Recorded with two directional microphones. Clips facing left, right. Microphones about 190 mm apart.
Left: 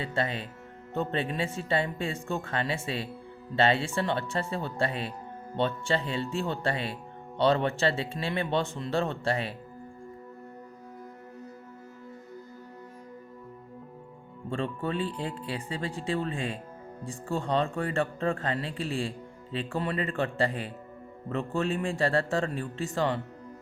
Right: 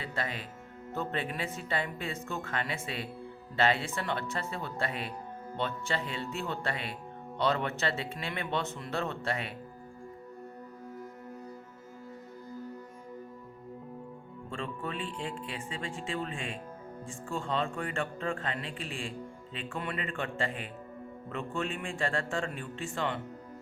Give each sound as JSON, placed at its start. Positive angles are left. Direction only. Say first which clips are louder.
{"t": 0.0, "sound": "speech", "louder": "left 6 dB", "side_deg": 30}
{"t": 14.5, "sound": "speech", "louder": "left 7 dB", "side_deg": 35}